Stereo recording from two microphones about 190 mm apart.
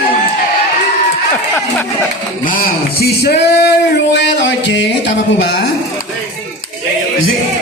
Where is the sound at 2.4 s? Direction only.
50° left (ahead or behind).